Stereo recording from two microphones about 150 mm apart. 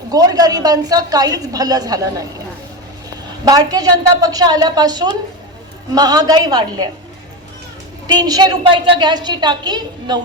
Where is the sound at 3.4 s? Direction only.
25° right (ahead or behind).